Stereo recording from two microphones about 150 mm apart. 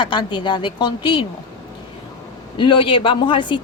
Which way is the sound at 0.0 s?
30° left (ahead or behind).